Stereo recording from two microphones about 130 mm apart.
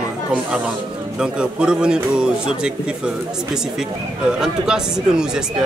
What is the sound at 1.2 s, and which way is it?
A man's voice, 5° right (ahead or behind).